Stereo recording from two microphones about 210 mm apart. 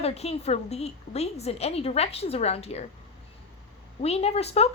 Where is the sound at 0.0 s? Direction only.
30° left (ahead or behind).